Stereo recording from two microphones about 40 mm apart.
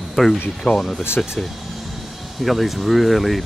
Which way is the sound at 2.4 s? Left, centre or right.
Centre.